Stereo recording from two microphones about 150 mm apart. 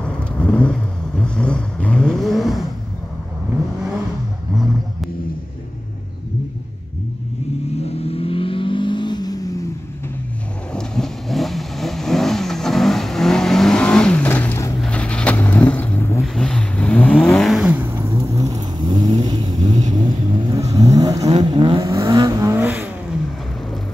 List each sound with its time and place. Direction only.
0.0 s vehicle: 5° left (ahead or behind)
8.0 s vehicle: 40° left (ahead or behind)
10.7 s vehicle: 5° left (ahead or behind)
17.8 s vehicle: 15° right (ahead or behind); by 19.6 s 30° right (ahead or behind)
19.6 s vehicle: 50° right (ahead or behind)
20.7 s vehicle: 25° right (ahead or behind)
21.2 s vehicle: 45° right (ahead or behind)
21.5 s vehicle: 35° right (ahead or behind)
21.8 s vehicle: 20° right (ahead or behind)